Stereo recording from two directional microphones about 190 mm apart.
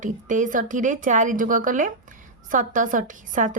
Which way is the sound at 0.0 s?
40° right (ahead or behind).